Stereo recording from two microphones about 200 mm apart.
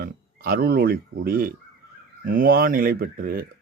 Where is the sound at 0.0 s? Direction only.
50° right (ahead or behind).